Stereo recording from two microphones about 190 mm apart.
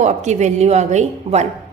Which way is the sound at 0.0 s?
35° right (ahead or behind).